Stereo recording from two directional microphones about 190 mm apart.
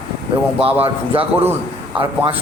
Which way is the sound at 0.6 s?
30° right (ahead or behind).